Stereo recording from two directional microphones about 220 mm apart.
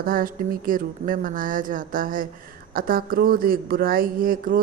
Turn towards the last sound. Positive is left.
turn(degrees=-40)  # may be behind; listen again after turning